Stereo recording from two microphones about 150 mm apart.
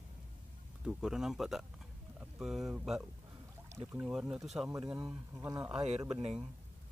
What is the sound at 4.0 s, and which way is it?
Speech, 5° right (ahead or behind).